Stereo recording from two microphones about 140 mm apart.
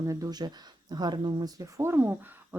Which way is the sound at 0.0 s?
25° right (ahead or behind).